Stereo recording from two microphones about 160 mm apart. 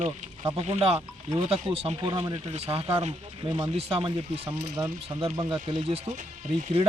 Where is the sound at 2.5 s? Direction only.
40° right (ahead or behind).